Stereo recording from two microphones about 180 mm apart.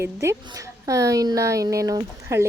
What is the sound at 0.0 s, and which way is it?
A woman's voice, 15° right (ahead or behind).